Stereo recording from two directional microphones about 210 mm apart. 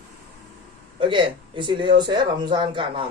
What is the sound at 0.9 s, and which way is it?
Speech, 25° right (ahead or behind).